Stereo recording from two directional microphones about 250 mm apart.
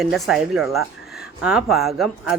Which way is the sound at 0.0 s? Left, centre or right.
Centre.